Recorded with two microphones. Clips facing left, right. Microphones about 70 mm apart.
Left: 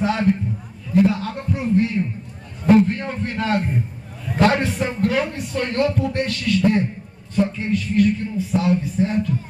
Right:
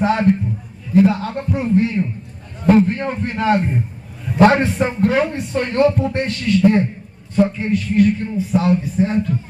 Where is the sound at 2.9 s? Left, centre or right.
Right.